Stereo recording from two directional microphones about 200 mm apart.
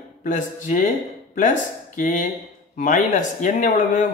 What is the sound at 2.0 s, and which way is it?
Speech, 40° left (ahead or behind).